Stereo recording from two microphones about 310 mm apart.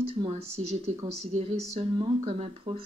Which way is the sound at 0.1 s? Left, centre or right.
Centre.